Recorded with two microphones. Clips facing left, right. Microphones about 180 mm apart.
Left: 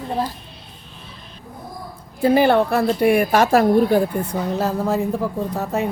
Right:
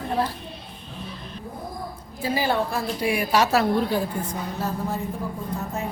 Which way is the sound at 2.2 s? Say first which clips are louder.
Left 9 dB; 60° left (ahead or behind).